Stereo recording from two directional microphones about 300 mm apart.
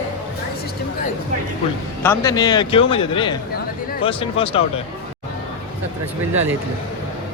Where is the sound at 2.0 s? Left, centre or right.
Centre.